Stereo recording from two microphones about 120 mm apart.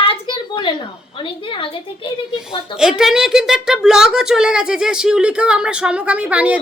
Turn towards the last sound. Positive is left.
turn(degrees=-10)  # may be behind; listen again after turning